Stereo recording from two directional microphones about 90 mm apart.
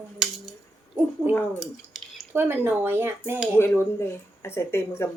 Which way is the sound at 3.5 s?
25° left (ahead or behind).